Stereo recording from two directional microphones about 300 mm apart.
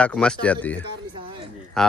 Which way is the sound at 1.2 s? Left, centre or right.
Centre.